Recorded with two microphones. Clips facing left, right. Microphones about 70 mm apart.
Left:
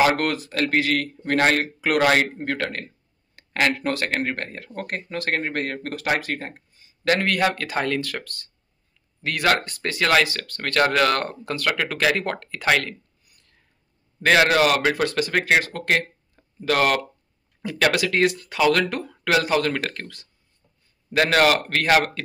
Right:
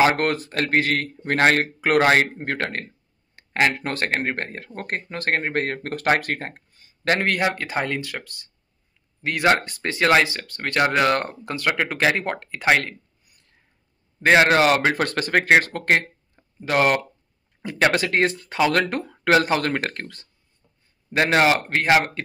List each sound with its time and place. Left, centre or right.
0.0 s speech: right
3.3 s speech: right
7.1 s speech: right
14.2 s speech: right
16.3 s a sound: right
17.6 s speech: right